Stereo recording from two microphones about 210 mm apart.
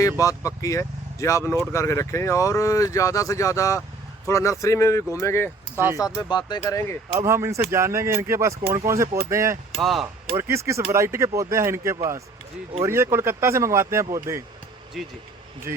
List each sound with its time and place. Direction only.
0.2 s speech: 15° left (ahead or behind)
5.7 s speech: 10° right (ahead or behind)
6.1 s speech: 20° left (ahead or behind)
7.2 s speech: 10° right (ahead or behind)
9.8 s speech: centre (ahead or behind)
10.3 s speech: 15° right (ahead or behind)
15.0 s speech: centre (ahead or behind)